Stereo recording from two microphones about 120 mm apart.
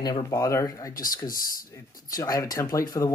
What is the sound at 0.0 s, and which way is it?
Speech, 30° left (ahead or behind).